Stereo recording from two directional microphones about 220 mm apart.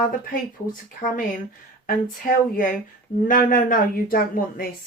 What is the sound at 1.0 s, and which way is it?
Speech, 40° left (ahead or behind).